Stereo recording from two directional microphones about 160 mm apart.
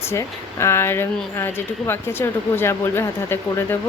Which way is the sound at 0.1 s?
15° left (ahead or behind).